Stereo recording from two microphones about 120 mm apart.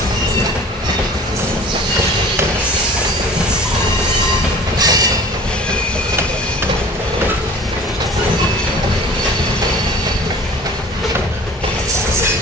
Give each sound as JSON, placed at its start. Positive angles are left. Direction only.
{"t": 4.7, "sound": "train", "side_deg": -30}